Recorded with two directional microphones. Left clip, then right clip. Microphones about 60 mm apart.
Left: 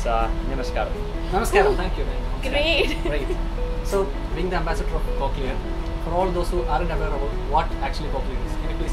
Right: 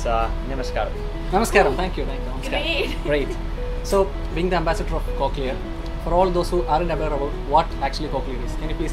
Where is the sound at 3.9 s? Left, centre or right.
Right.